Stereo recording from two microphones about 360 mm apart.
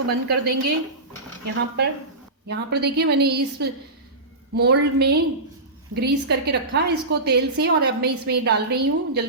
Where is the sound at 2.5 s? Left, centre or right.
Right.